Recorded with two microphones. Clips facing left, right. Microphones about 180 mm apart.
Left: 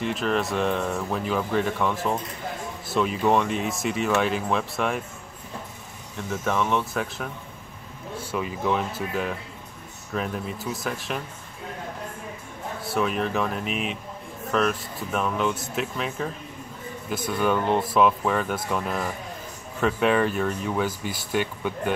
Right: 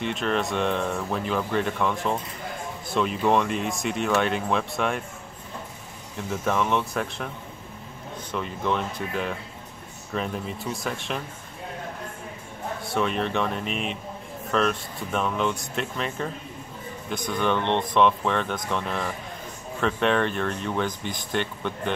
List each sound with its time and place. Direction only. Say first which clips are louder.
0.0 s speech: left 1 dB; centre (ahead or behind)
6.1 s speech: even; centre (ahead or behind)
12.8 s speech: left 1 dB; 5° left (ahead or behind)